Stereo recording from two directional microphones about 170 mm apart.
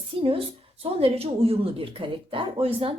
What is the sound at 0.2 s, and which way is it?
A woman's voice, 35° right (ahead or behind).